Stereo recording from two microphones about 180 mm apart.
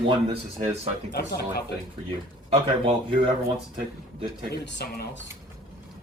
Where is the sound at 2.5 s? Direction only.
30° right (ahead or behind).